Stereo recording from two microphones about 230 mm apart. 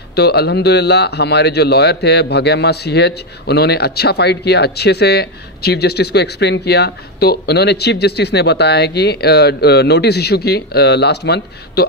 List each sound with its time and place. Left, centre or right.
0.1 s speech: left